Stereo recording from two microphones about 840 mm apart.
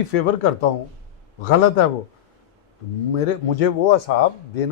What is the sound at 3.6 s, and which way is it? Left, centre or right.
Speech, left.